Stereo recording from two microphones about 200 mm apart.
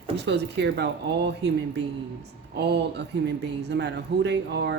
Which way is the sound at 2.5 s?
55° right (ahead or behind).